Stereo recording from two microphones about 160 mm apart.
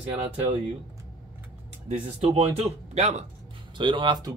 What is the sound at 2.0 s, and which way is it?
Speech, 40° right (ahead or behind).